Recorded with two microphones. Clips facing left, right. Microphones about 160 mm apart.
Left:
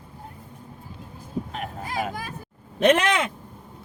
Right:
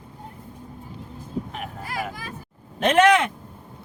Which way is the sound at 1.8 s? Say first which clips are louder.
Left 2 dB; 20° left (ahead or behind).